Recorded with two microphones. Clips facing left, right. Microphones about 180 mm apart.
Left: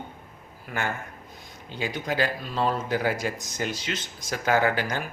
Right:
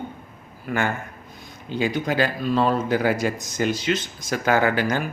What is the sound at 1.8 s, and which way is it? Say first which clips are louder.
A man's voice: right 5 dB; 75° right (ahead or behind).